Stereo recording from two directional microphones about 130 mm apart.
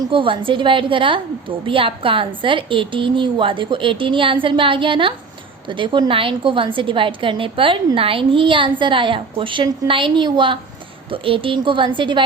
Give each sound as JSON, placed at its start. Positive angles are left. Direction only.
{"t": 0.0, "sound": "a woman's voice", "side_deg": -40}